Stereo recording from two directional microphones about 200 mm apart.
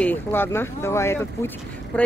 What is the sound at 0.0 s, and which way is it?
Speech, 10° left (ahead or behind).